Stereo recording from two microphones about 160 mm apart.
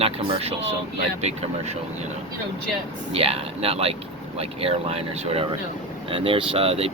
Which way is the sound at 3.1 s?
35° right (ahead or behind).